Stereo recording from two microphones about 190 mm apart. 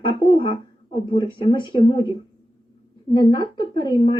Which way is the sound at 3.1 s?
25° left (ahead or behind).